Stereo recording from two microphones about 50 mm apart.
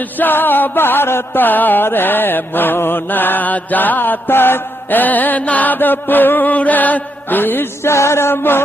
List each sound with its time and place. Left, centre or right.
0.2 s music: left
7.9 s music: left